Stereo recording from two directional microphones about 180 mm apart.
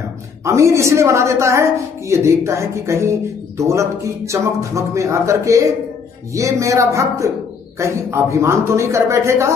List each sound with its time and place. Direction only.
0.5 s a woman's voice: 15° right (ahead or behind)